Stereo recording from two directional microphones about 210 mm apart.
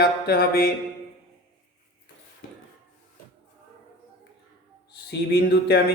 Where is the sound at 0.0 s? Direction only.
45° left (ahead or behind).